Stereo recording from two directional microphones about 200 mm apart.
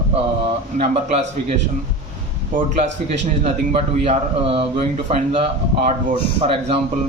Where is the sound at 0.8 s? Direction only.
35° right (ahead or behind).